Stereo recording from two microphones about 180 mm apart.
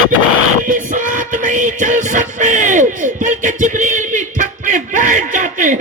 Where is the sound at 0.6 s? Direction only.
50° right (ahead or behind).